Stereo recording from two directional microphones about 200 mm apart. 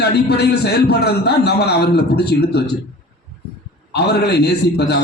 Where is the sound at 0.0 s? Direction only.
55° left (ahead or behind).